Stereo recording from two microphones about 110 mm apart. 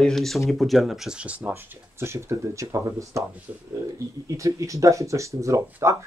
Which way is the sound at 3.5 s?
15° right (ahead or behind).